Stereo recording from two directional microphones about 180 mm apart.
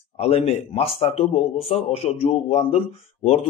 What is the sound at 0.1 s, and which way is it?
A man's voice, 35° left (ahead or behind).